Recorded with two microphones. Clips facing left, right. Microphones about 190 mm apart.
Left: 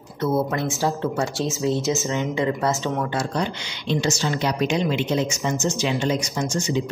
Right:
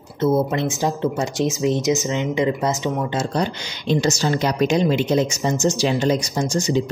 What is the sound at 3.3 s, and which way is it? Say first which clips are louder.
Speech: right 3 dB; 40° right (ahead or behind).